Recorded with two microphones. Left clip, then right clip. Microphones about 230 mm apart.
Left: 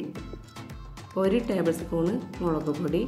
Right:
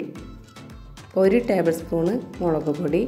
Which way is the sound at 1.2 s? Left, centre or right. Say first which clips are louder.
Right 6 dB; centre.